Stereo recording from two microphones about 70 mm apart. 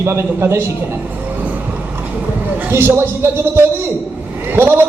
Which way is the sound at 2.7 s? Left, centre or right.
Right.